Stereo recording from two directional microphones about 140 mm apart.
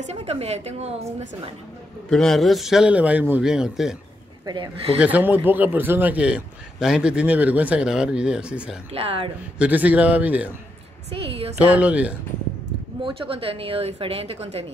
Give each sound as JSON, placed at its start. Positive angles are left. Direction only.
{"t": 0.0, "sound": "a woman's voice", "side_deg": -50}
{"t": 2.0, "sound": "a man's voice", "side_deg": 5}
{"t": 4.9, "sound": "a man's voice", "side_deg": -10}
{"t": 8.9, "sound": "a woman's voice", "side_deg": -40}
{"t": 9.6, "sound": "a man's voice", "side_deg": -10}
{"t": 11.1, "sound": "a woman's voice", "side_deg": -45}
{"t": 11.7, "sound": "a man's voice", "side_deg": -10}
{"t": 13.0, "sound": "a woman's voice", "side_deg": -40}